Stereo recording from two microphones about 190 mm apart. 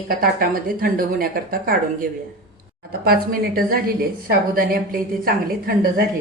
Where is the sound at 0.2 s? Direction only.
50° right (ahead or behind).